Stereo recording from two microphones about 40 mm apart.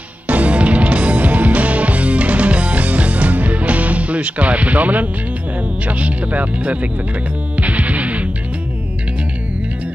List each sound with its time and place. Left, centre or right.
0.3 s music: right
5.9 s speech: right
7.6 s music: right